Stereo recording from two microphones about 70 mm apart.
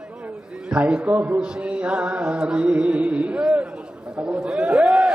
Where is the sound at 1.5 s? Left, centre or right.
Centre.